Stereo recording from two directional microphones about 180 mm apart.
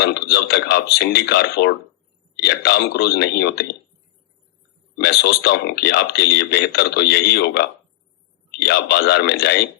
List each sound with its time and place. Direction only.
0.0 s speech: 65° left (ahead or behind)
4.9 s speech: 65° left (ahead or behind)